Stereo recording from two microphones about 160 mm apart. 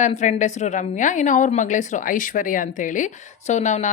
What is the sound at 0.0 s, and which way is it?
A woman's voice, 50° left (ahead or behind).